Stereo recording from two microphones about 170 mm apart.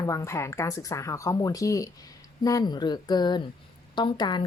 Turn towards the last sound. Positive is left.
turn(degrees=25)  # may be behind; listen again after turning